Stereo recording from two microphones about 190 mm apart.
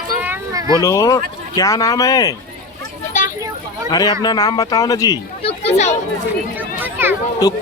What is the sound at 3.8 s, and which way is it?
Speech, 20° left (ahead or behind).